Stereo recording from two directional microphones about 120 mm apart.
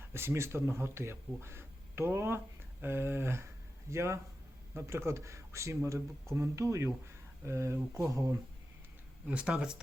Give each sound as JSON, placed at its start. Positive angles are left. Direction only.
{"t": 0.1, "sound": "speech", "side_deg": -20}
{"t": 9.2, "sound": "speech", "side_deg": -10}